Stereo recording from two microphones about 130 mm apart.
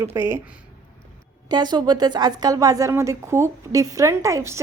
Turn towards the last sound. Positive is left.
turn(degrees=-20)  # may be behind; listen again after turning